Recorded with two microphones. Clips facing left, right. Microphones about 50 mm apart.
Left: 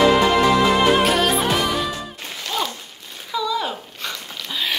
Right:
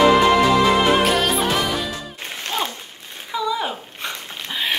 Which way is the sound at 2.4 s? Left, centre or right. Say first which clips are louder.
Even; right.